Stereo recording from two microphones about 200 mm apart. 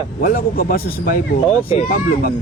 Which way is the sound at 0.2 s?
45° left (ahead or behind).